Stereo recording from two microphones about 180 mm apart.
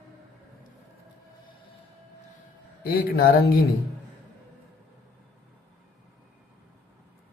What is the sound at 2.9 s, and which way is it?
Speech, 60° left (ahead or behind).